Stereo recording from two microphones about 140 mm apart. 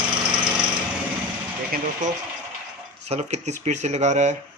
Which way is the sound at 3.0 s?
50° right (ahead or behind).